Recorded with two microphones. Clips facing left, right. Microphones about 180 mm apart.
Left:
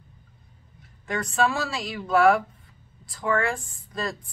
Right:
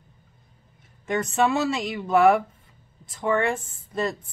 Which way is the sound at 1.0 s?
20° right (ahead or behind).